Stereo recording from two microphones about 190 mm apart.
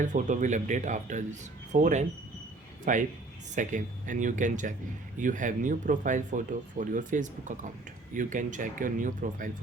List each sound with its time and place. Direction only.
0.0 s speech: 40° right (ahead or behind)